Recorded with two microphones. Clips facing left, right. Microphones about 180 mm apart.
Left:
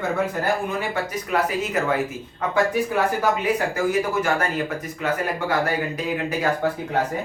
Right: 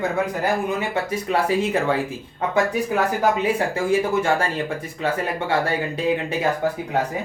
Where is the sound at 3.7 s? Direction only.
30° right (ahead or behind).